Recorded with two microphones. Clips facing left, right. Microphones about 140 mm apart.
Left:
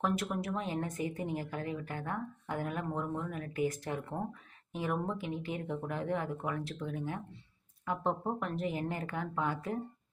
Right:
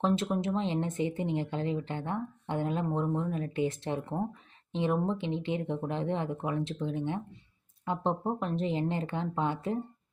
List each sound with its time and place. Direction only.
0.0 s speech: 25° right (ahead or behind)